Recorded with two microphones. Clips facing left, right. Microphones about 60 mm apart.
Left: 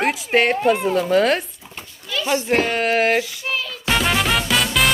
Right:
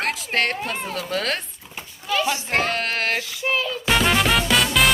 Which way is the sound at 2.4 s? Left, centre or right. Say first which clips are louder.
Left 4 dB; centre.